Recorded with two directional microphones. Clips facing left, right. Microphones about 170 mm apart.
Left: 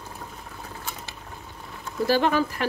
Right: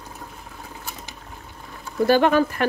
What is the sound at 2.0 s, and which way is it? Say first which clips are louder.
Speech: right 5 dB; 55° right (ahead or behind).